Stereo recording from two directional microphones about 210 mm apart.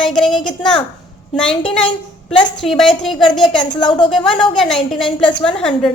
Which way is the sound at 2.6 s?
Centre (ahead or behind).